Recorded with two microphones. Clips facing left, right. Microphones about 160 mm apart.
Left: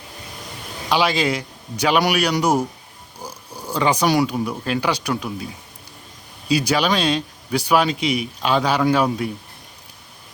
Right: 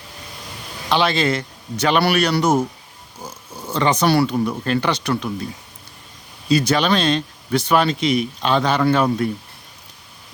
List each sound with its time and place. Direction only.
0.9 s speech: 10° left (ahead or behind)
6.5 s speech: 10° left (ahead or behind)